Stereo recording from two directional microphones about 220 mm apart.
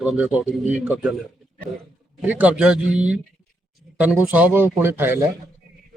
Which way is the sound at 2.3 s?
5° right (ahead or behind).